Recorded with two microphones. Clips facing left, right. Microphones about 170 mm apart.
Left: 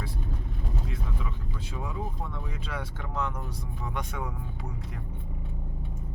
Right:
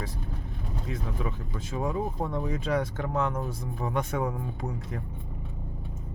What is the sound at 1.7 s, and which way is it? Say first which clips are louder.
Speech: right 7 dB; 40° right (ahead or behind).